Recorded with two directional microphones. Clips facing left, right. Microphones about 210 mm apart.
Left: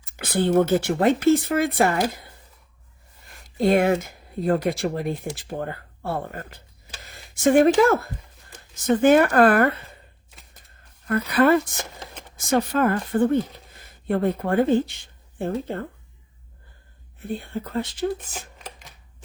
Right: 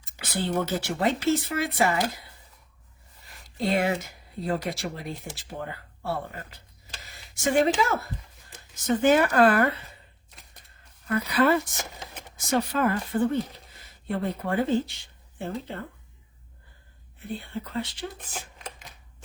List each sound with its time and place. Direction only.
0.0 s speech: 55° left (ahead or behind)
3.2 s speech: 50° left (ahead or behind)
11.1 s speech: 50° left (ahead or behind)
17.3 s speech: 50° left (ahead or behind)
18.2 s a sound: centre (ahead or behind)